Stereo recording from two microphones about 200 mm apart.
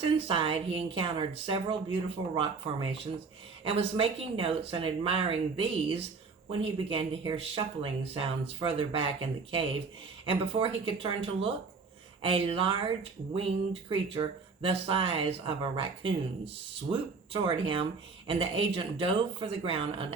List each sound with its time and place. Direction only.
0.0 s speech: 25° right (ahead or behind)
10.2 s speech: 25° right (ahead or behind)